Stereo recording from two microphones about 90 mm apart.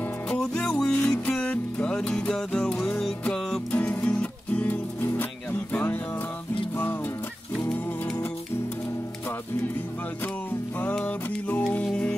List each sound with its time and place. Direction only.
0.4 s music: 10° left (ahead or behind)
3.7 s music: 20° left (ahead or behind)
7.7 s music: 20° left (ahead or behind)
11.1 s music: 20° left (ahead or behind)